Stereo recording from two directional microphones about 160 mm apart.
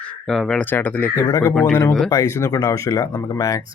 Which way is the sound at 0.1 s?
5° left (ahead or behind).